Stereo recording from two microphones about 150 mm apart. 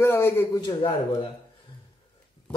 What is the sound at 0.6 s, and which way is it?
Speech, 35° left (ahead or behind).